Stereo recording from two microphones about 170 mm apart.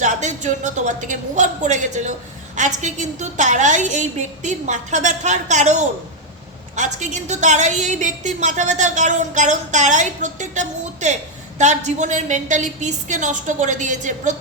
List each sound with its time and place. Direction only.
0.0 s a woman's voice: 45° right (ahead or behind)